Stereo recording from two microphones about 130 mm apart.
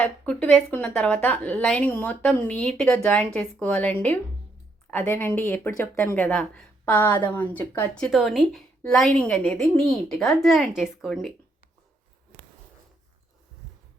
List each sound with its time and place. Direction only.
0.0 s speech: 10° left (ahead or behind)
8.0 s a woman's voice: centre (ahead or behind)